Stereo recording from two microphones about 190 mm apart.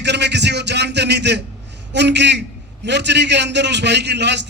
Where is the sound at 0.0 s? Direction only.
65° right (ahead or behind).